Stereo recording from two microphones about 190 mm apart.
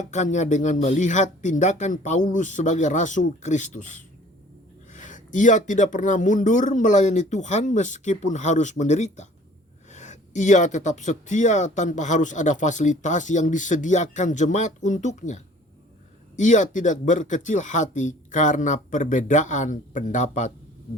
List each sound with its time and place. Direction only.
0.0 s speech: 40° left (ahead or behind)